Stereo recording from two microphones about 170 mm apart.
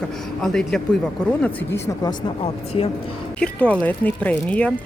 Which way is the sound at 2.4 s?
35° left (ahead or behind).